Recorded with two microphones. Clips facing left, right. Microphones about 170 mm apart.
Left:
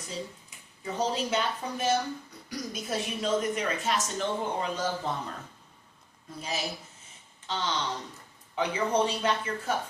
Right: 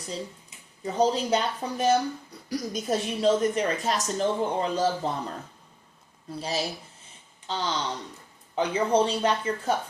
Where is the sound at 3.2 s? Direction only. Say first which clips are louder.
Right 6 dB; 35° right (ahead or behind).